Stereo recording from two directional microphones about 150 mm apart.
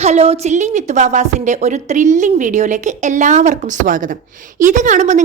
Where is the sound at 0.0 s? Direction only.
45° right (ahead or behind).